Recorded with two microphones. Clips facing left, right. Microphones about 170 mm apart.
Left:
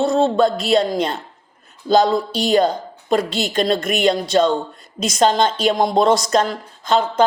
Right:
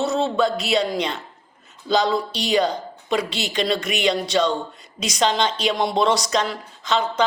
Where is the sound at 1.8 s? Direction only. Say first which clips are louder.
Left 5 dB; 45° left (ahead or behind).